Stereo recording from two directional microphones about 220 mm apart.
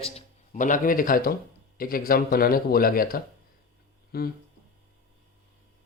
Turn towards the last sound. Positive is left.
turn(degrees=45)  # may be behind; listen again after turning